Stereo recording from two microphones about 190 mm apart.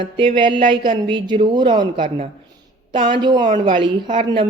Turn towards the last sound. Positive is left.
turn(degrees=-25)  # may be behind; listen again after turning